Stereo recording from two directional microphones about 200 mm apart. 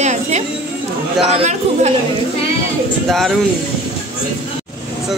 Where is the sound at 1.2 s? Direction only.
30° right (ahead or behind).